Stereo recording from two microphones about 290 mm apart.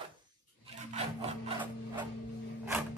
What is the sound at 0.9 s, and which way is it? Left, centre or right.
Wood, right.